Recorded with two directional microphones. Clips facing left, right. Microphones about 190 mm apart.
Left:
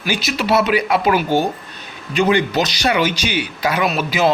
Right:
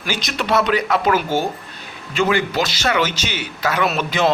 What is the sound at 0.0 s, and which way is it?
A man's voice, 5° left (ahead or behind).